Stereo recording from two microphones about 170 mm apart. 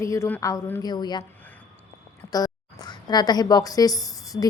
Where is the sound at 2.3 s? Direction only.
20° left (ahead or behind).